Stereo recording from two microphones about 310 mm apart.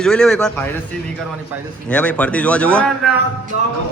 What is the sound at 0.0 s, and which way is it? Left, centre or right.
Speech, centre.